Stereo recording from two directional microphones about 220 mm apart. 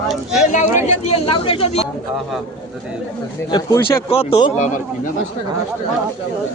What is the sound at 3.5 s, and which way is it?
A man's voice, 25° left (ahead or behind).